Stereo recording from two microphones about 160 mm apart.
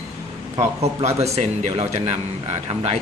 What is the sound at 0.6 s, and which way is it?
Speech, 40° right (ahead or behind).